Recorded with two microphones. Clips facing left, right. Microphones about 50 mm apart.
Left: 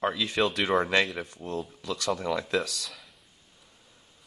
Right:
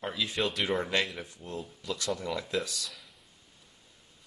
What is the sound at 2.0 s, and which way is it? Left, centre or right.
Speech, left.